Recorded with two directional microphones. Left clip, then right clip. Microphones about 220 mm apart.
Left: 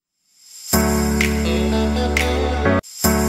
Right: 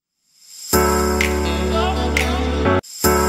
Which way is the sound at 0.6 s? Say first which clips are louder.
Right 3 dB; centre (ahead or behind).